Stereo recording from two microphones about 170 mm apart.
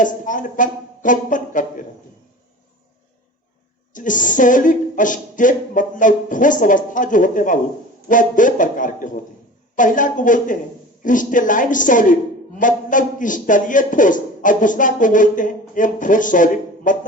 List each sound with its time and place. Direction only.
0.0 s a man's voice: 50° left (ahead or behind)
3.9 s a man's voice: 50° left (ahead or behind)